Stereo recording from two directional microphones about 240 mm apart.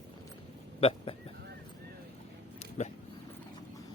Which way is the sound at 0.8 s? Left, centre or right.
Left.